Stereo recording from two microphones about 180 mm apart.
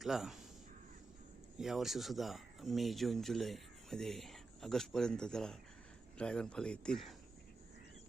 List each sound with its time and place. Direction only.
0.0 s speech: centre (ahead or behind)
1.5 s speech: centre (ahead or behind)